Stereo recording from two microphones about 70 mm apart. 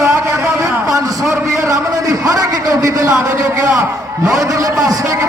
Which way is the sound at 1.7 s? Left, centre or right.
Right.